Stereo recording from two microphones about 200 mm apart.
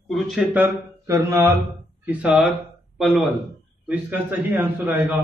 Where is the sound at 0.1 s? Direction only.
5° right (ahead or behind).